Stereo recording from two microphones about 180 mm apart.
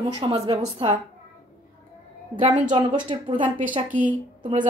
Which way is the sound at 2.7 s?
25° right (ahead or behind).